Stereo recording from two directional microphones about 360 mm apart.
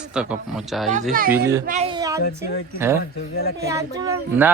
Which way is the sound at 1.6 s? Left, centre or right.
Centre.